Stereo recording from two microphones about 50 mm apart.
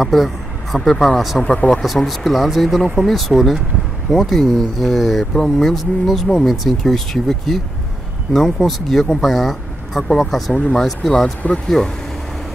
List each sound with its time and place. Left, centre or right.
0.0 s speech: centre
1.4 s speech: left
1.7 s speech: centre
11.4 s speech: left